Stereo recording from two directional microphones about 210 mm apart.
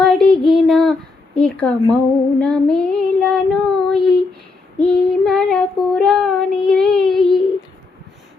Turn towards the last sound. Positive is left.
turn(degrees=0)  # may be behind; listen again after turning